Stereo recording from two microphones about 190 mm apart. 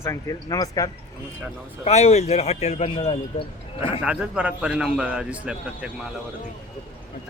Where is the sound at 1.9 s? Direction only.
35° left (ahead or behind).